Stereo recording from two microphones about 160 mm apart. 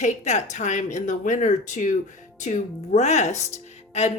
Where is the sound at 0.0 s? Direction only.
45° left (ahead or behind).